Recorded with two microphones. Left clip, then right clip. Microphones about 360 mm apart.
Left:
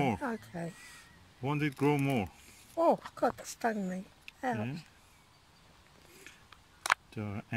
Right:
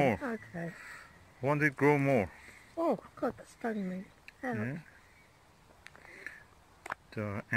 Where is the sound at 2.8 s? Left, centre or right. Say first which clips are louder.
Left 4 dB; left.